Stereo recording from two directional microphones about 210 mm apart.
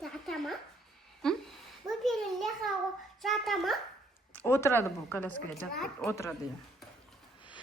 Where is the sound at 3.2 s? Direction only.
Centre (ahead or behind).